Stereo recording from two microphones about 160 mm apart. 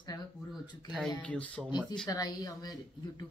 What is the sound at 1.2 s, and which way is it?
Speech, 10° left (ahead or behind).